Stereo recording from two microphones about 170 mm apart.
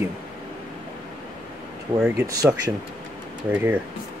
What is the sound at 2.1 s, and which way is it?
Speech, 20° right (ahead or behind).